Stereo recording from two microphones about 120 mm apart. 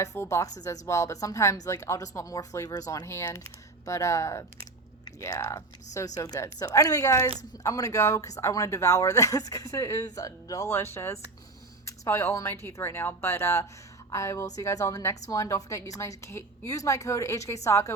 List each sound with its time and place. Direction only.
0.0 s speech: 25° left (ahead or behind)